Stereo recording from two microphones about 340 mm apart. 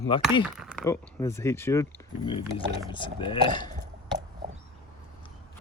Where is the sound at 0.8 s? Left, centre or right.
Centre.